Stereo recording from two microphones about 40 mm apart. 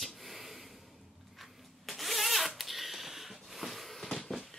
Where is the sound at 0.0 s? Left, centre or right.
Centre.